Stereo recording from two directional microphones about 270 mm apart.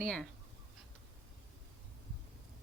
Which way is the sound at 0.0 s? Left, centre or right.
Centre.